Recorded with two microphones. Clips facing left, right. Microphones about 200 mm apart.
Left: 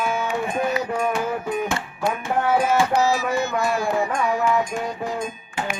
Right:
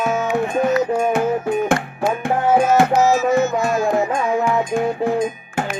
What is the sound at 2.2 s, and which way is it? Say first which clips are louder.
Music: right 5 dB; 55° right (ahead or behind).